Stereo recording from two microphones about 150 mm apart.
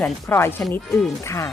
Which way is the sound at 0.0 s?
15° left (ahead or behind).